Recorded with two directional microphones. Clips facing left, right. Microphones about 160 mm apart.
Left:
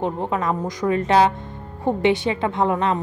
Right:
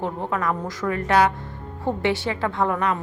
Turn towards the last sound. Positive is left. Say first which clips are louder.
# left 2 dB
turn(degrees=25)  # may be behind; listen again after turning